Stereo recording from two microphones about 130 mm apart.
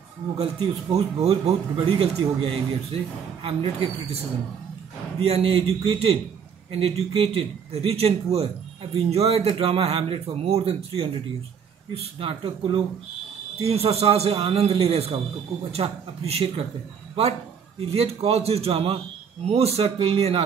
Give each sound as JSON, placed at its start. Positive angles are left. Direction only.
{"t": 0.4, "sound": "speech", "side_deg": -50}
{"t": 5.2, "sound": "speech", "side_deg": -50}
{"t": 12.2, "sound": "speech", "side_deg": -45}
{"t": 17.7, "sound": "speech", "side_deg": -50}